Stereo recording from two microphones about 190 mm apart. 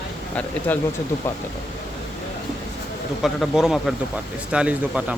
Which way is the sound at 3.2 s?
Centre (ahead or behind).